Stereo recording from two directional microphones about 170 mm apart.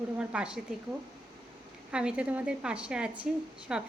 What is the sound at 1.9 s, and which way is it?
A woman's voice, 5° right (ahead or behind).